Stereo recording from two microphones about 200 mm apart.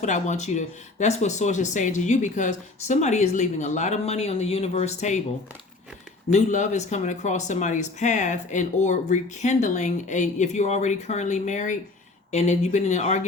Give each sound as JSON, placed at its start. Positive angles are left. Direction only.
{"t": 0.0, "sound": "speech", "side_deg": 35}
{"t": 6.3, "sound": "speech", "side_deg": 35}